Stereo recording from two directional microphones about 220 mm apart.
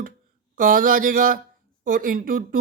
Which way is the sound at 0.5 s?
40° right (ahead or behind).